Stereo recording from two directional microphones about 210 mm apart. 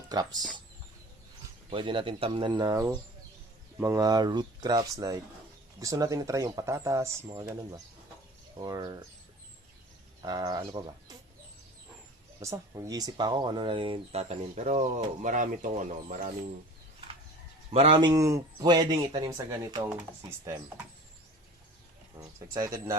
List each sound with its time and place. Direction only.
0.1 s speech: 20° right (ahead or behind)
1.7 s speech: 25° right (ahead or behind)
10.2 s speech: 20° right (ahead or behind)
12.4 s speech: 15° right (ahead or behind); by 16.3 s 40° right (ahead or behind)
17.7 s speech: 25° right (ahead or behind)
22.2 s speech: 15° right (ahead or behind)